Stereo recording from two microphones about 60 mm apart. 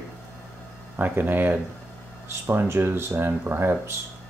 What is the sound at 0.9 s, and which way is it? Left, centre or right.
Speech, right.